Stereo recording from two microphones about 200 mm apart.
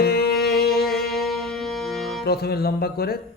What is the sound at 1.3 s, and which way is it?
Music, centre (ahead or behind).